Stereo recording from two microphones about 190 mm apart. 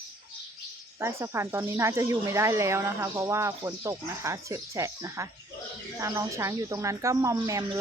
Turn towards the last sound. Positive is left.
turn(degrees=-20)  # may be behind; listen again after turning